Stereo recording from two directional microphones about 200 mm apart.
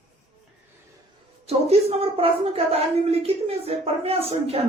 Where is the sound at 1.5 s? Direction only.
30° right (ahead or behind).